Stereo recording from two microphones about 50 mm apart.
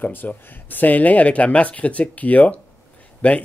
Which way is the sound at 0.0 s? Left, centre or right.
Left.